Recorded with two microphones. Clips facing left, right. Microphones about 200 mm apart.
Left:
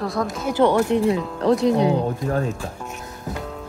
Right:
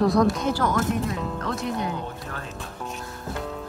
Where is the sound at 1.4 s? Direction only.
35° left (ahead or behind).